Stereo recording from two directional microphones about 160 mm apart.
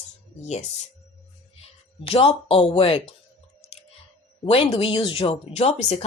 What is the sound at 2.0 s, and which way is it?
Speech, 35° left (ahead or behind).